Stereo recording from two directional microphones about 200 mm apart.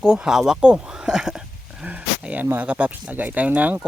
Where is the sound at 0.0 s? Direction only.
5° right (ahead or behind).